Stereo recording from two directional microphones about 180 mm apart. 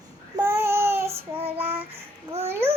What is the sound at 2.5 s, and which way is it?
Child singing, 15° right (ahead or behind).